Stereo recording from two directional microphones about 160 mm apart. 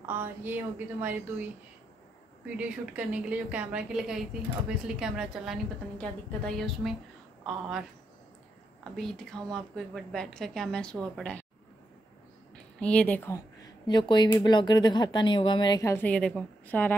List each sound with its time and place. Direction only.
0.2 s speech: 10° right (ahead or behind)
2.5 s a woman's voice: 10° right (ahead or behind)
8.9 s a woman's voice: 5° left (ahead or behind)
12.8 s speech: 10° left (ahead or behind)
16.1 s a woman's voice: 5° left (ahead or behind)